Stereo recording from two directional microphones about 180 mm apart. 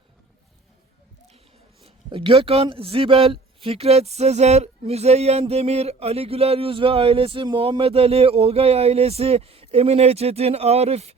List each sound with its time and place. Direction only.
1.8 s a man's voice: 25° right (ahead or behind)